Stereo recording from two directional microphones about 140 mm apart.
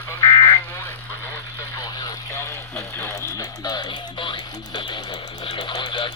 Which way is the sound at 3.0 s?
20° left (ahead or behind).